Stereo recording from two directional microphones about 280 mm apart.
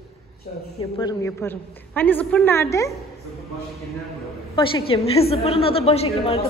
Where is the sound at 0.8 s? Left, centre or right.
Centre.